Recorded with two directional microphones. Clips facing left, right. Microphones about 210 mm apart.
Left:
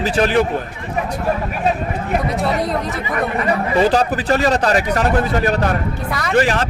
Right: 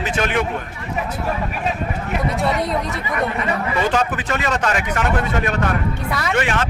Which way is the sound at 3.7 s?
35° left (ahead or behind).